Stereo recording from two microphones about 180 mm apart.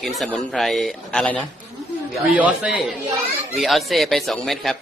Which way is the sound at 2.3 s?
10° right (ahead or behind).